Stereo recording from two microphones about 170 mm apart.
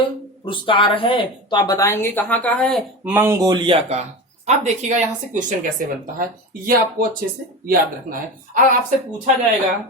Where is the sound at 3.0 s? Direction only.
15° right (ahead or behind); by 5.7 s 45° right (ahead or behind).